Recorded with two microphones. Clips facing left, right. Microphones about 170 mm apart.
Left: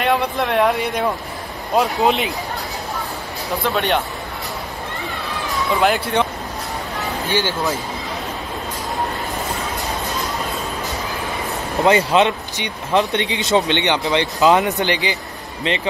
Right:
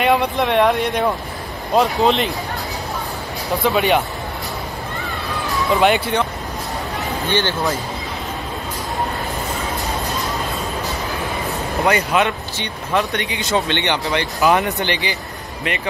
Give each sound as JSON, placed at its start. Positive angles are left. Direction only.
{"t": 0.0, "sound": "speech", "side_deg": 0}
{"t": 3.6, "sound": "speech", "side_deg": -5}
{"t": 5.8, "sound": "speech", "side_deg": 0}
{"t": 7.2, "sound": "speech", "side_deg": 10}
{"t": 11.8, "sound": "speech", "side_deg": 25}